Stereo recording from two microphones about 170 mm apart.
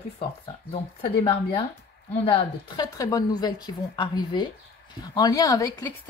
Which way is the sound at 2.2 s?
25° left (ahead or behind).